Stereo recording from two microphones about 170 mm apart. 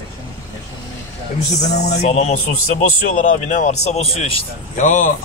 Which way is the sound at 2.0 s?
40° left (ahead or behind).